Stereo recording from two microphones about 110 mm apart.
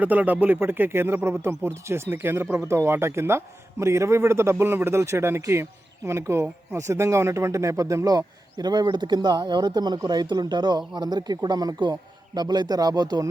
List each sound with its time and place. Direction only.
0.0 s a man's voice: 15° right (ahead or behind); by 13.2 s 40° right (ahead or behind)